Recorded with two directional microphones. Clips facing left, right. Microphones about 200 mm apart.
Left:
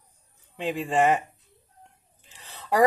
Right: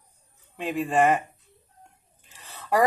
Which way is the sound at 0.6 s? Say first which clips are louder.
Right 1 dB; 15° right (ahead or behind).